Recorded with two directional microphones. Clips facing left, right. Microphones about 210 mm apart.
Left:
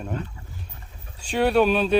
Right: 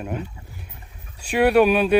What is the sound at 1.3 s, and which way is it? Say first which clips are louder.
Speech: right 3 dB; 10° right (ahead or behind).